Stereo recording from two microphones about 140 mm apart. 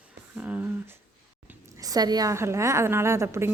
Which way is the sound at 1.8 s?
25° right (ahead or behind).